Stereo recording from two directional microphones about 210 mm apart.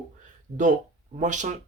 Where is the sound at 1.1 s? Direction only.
35° right (ahead or behind).